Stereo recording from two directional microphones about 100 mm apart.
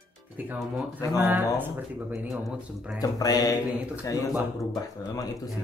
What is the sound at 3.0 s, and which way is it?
Speech, 40° left (ahead or behind).